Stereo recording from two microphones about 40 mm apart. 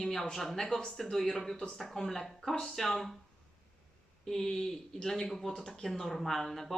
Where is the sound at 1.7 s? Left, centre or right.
Centre.